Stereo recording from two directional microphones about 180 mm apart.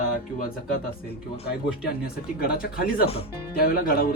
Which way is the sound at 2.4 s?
55° left (ahead or behind).